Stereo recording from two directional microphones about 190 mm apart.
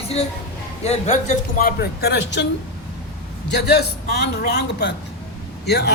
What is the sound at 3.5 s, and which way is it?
A man's voice, 60° left (ahead or behind).